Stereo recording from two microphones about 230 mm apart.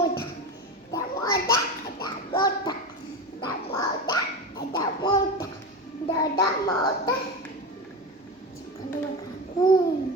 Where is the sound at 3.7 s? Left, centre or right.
Centre.